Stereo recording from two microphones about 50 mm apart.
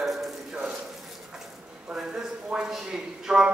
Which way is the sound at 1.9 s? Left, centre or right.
Centre.